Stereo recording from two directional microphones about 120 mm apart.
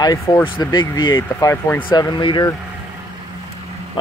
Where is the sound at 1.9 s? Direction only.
35° left (ahead or behind).